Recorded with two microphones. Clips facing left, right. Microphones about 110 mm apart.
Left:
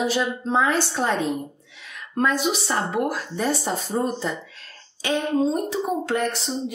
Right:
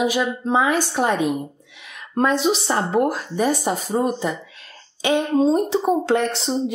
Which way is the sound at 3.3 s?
15° right (ahead or behind).